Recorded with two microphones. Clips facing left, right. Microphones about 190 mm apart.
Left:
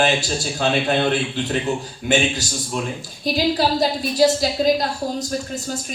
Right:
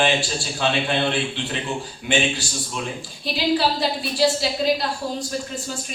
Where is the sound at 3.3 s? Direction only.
45° left (ahead or behind).